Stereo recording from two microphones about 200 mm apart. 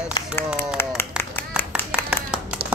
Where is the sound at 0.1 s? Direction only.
10° left (ahead or behind).